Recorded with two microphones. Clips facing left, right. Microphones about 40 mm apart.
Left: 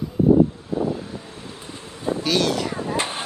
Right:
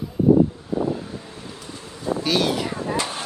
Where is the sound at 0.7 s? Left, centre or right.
Centre.